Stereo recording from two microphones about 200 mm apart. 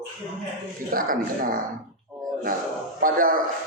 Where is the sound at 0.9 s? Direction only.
45° right (ahead or behind).